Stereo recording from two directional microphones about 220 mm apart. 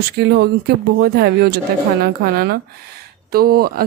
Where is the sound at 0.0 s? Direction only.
45° right (ahead or behind).